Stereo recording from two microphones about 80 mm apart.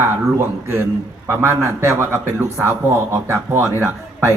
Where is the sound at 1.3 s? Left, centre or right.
Right.